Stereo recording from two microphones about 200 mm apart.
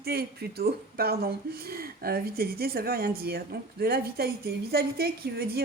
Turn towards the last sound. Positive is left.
turn(degrees=-50)  # may be behind; listen again after turning